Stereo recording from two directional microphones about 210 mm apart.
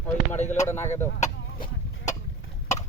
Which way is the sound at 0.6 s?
10° left (ahead or behind).